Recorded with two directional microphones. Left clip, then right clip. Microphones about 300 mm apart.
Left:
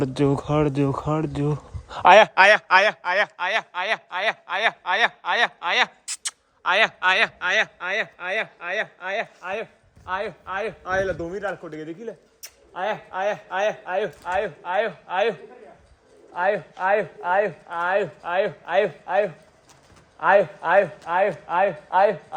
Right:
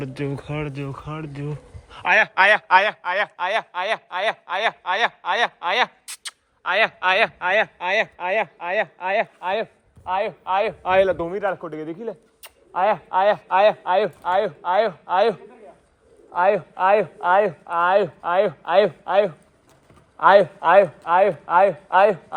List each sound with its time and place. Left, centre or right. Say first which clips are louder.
0.0 s a man's voice: left 7 dB; centre
10.1 s a man's voice: right 6 dB; centre
11.0 s a man's voice: right 6 dB; centre
16.3 s speech: right 4 dB; right